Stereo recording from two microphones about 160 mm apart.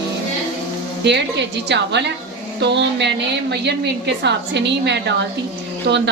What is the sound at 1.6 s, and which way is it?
A woman's voice, 90° right.